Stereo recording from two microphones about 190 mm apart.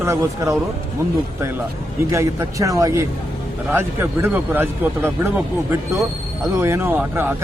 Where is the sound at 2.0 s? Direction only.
15° right (ahead or behind).